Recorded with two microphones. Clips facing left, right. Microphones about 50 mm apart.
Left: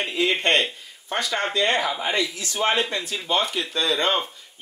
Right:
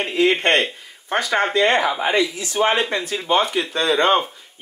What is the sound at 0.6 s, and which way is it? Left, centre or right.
Speech, centre.